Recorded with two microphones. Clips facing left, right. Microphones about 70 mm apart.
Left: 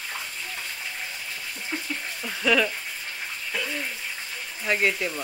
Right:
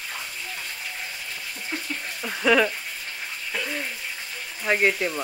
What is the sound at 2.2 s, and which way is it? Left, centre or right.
Speech, centre.